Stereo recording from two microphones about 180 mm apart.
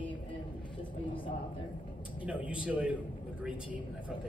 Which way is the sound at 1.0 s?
25° left (ahead or behind).